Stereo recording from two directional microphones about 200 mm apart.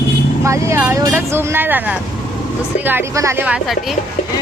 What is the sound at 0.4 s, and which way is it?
Speech, 15° right (ahead or behind).